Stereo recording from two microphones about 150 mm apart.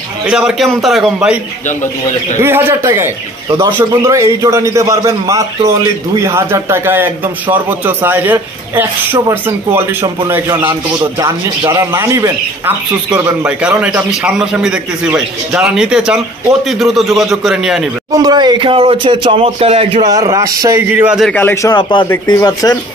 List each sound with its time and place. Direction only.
0.3 s a man's voice: 5° right (ahead or behind)
2.4 s a man's voice: 15° right (ahead or behind)
11.6 s a man's voice: 30° right (ahead or behind); by 17.8 s centre (ahead or behind)
18.1 s speech: 25° right (ahead or behind); by 20.0 s 40° right (ahead or behind)
20.0 s speech: 25° right (ahead or behind)
21.2 s speech: 10° left (ahead or behind)
22.2 s speech: 25° left (ahead or behind)